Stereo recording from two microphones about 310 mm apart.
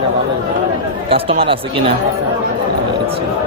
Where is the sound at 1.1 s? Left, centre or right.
Centre.